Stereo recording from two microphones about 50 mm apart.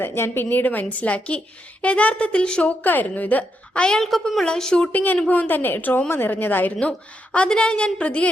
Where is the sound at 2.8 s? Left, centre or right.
Left.